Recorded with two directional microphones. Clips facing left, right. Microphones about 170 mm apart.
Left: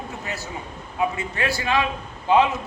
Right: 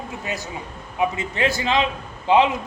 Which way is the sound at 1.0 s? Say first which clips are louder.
Right 3 dB; 20° right (ahead or behind).